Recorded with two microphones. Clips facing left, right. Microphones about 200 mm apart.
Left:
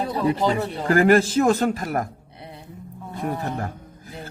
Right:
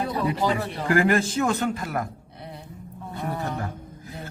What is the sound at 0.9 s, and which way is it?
A man's voice, 40° left (ahead or behind).